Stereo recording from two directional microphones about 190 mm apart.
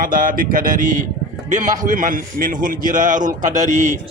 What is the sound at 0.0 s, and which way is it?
A man's voice, 50° right (ahead or behind).